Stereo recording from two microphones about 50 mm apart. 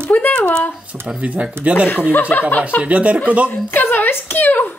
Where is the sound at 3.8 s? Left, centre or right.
Left.